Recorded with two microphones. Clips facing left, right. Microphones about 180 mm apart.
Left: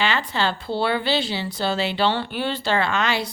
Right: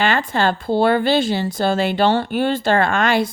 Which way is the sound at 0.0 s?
50° right (ahead or behind).